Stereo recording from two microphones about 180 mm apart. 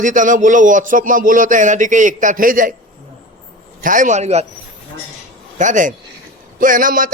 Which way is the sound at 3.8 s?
45° right (ahead or behind).